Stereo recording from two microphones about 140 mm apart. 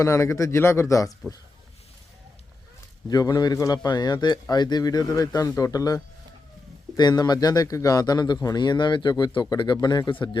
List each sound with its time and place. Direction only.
0.0 s a man's voice: 20° left (ahead or behind)
3.1 s a man's voice: 25° left (ahead or behind)